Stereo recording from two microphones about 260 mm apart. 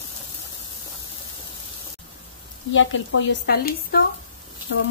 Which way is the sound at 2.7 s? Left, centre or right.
Left.